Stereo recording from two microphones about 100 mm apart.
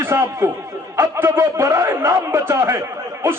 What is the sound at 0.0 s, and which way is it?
A man's voice, 25° right (ahead or behind).